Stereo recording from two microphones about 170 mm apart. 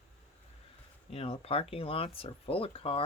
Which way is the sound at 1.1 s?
35° left (ahead or behind).